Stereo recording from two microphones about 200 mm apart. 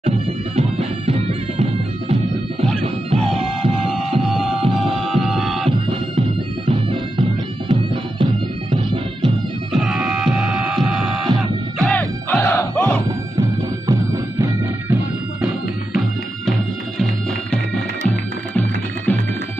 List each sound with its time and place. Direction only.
0.6 s music: 30° right (ahead or behind)
4.8 s music: centre (ahead or behind)
5.7 s music: 25° right (ahead or behind)
6.9 s bagpipes: 25° right (ahead or behind)
9.7 s music: centre (ahead or behind)
13.4 s music: 15° right (ahead or behind)
18.0 s music: 10° left (ahead or behind)